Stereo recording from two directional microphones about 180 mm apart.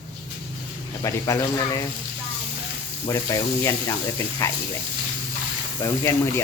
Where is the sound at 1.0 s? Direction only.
15° left (ahead or behind).